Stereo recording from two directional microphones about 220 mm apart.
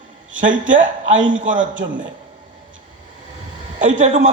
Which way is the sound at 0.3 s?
60° right (ahead or behind).